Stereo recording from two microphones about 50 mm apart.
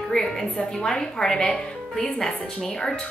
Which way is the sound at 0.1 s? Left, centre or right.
Centre.